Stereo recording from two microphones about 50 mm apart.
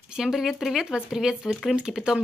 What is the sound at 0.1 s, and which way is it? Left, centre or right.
Speech, centre.